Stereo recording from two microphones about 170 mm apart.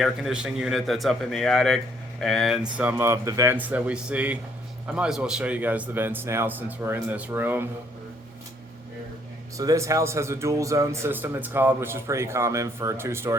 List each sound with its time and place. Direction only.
0.0 s a man's voice: 5° right (ahead or behind)
9.6 s speech: 20° right (ahead or behind)